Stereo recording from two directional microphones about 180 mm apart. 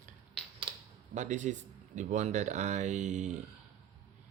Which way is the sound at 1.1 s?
45° right (ahead or behind).